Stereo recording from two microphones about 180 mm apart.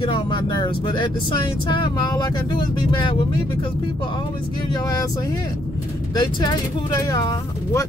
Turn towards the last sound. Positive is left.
turn(degrees=20)  # may be behind; listen again after turning